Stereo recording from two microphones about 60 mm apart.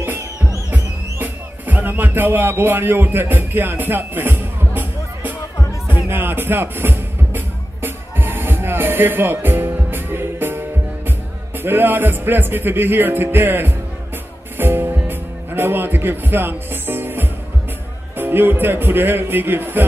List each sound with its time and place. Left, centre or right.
0.7 s music: right
18.1 s speech: right